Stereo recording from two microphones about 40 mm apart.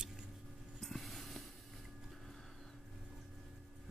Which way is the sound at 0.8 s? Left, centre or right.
Centre.